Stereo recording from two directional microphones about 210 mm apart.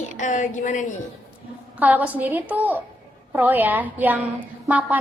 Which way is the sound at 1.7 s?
5° right (ahead or behind).